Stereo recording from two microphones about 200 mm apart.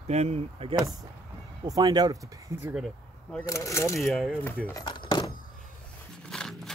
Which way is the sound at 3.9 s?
Centre (ahead or behind).